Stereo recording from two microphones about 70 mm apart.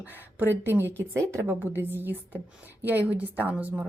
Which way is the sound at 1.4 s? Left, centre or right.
Right.